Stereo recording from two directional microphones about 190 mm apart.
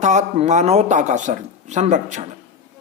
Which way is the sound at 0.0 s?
40° right (ahead or behind).